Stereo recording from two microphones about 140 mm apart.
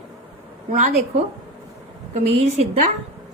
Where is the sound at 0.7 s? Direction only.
60° right (ahead or behind).